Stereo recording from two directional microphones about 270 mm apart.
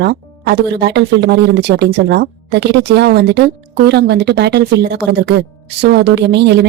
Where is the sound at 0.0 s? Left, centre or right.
Right.